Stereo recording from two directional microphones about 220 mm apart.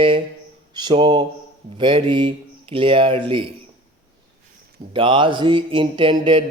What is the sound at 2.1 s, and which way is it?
Speech, 20° right (ahead or behind).